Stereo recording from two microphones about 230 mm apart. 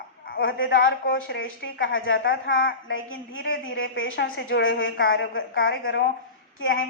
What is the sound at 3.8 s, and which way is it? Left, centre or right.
A woman's voice, left.